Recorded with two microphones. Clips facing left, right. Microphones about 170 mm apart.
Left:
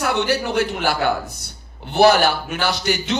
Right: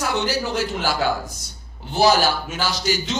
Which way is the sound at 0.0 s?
60° left (ahead or behind).